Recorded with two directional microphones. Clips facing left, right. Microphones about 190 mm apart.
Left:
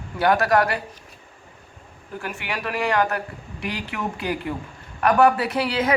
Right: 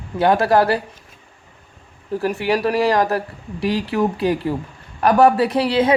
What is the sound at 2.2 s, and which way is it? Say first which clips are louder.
A woman's voice: right 11 dB; 35° right (ahead or behind).